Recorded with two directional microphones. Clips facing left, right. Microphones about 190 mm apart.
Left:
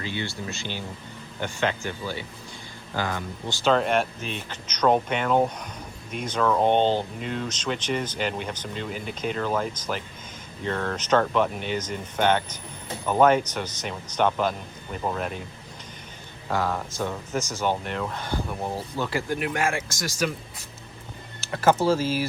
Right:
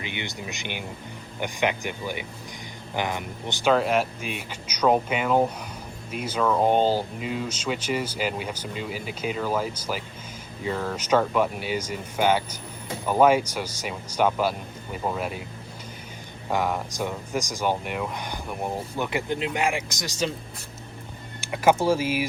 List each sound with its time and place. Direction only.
0.0 s speech: 20° right (ahead or behind)
3.7 s speech: 5° right (ahead or behind)
16.5 s speech: 15° right (ahead or behind)
21.4 s speech: 15° right (ahead or behind)